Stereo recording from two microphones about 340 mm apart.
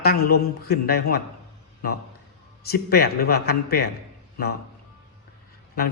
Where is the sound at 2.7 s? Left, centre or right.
Left.